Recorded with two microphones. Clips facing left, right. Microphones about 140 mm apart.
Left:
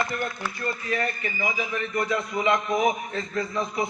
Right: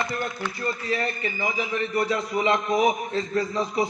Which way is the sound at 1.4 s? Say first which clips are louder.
Right 1 dB; 30° right (ahead or behind).